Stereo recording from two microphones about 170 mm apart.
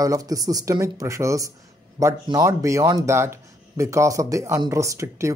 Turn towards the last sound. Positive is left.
turn(degrees=-15)  # may be behind; listen again after turning